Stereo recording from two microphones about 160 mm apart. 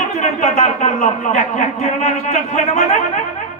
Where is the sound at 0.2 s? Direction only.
50° left (ahead or behind).